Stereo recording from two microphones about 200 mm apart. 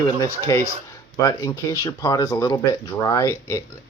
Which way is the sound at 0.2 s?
15° left (ahead or behind).